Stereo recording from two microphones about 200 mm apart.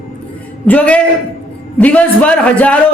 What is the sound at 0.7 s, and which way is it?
A man's voice, 5° left (ahead or behind).